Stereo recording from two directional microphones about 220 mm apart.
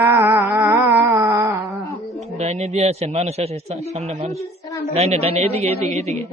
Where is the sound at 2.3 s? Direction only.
30° right (ahead or behind).